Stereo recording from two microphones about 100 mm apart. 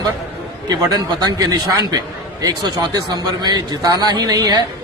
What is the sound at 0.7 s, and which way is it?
A man's voice, 40° right (ahead or behind).